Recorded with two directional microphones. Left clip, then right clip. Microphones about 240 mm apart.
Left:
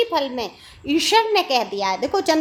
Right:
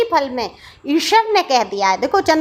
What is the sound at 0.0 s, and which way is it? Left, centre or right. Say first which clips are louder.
A woman's voice: right 4 dB; centre.